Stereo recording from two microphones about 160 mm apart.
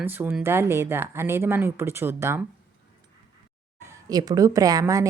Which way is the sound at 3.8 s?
20° right (ahead or behind).